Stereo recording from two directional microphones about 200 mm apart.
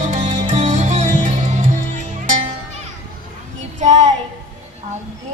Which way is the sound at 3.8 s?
35° right (ahead or behind).